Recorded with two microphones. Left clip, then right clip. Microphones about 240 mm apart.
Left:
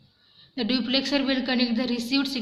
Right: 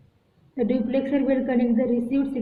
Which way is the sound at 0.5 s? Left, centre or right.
Left.